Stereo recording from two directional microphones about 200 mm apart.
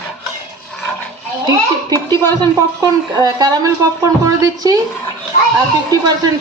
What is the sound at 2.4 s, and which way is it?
Speech, 20° right (ahead or behind).